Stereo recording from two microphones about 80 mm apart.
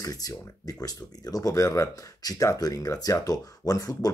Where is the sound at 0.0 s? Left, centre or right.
Left.